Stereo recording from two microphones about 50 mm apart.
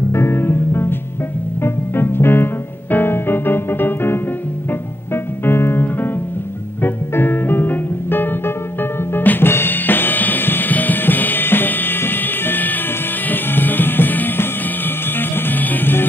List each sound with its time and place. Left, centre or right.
0.1 s music: left
9.5 s drum kit: left
13.3 s music: left